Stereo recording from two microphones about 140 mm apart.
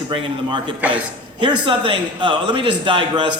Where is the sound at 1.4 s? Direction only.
35° right (ahead or behind).